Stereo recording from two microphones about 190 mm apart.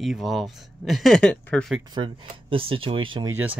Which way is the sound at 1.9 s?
25° right (ahead or behind).